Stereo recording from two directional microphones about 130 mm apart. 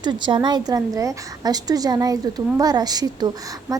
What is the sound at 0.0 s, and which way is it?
A woman's voice, 35° right (ahead or behind).